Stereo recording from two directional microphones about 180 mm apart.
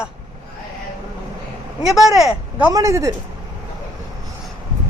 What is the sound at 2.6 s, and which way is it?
Speech, 15° right (ahead or behind).